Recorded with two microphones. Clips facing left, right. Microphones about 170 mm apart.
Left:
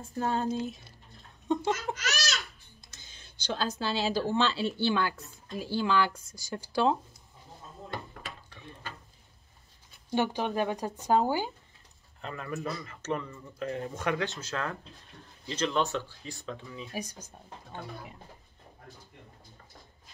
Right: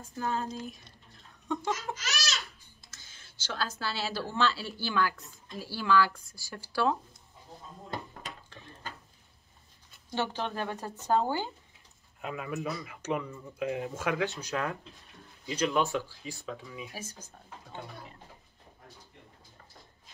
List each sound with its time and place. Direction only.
0.2 s speech: 30° left (ahead or behind)
2.0 s speech: 65° left (ahead or behind)
2.9 s speech: 20° left (ahead or behind)
10.1 s speech: 15° left (ahead or behind)
12.2 s speech: 10° right (ahead or behind)
16.9 s speech: 15° left (ahead or behind)